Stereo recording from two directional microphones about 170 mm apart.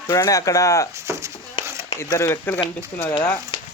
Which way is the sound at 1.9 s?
20° left (ahead or behind).